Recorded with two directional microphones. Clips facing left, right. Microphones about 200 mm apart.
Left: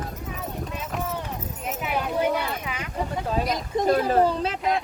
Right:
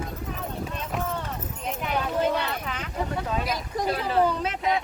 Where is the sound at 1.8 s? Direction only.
10° left (ahead or behind).